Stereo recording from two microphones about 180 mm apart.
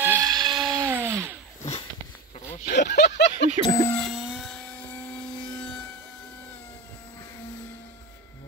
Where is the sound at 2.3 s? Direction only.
40° left (ahead or behind).